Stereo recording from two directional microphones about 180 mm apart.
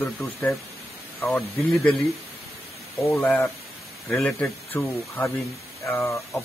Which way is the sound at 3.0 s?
10° left (ahead or behind).